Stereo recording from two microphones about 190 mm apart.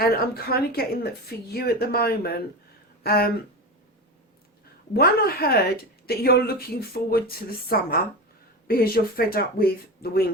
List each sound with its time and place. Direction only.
0.0 s speech: 55° left (ahead or behind)
4.9 s speech: 55° left (ahead or behind)